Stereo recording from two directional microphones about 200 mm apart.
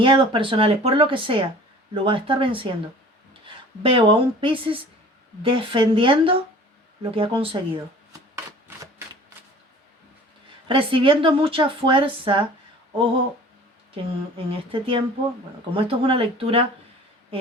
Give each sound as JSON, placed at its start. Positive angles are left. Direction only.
{"t": 0.0, "sound": "a woman's voice", "side_deg": -25}
{"t": 10.7, "sound": "a woman's voice", "side_deg": -25}
{"t": 14.5, "sound": "a woman's voice", "side_deg": -25}